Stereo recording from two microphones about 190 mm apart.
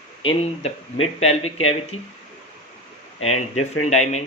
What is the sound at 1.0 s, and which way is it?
Speech, 30° left (ahead or behind).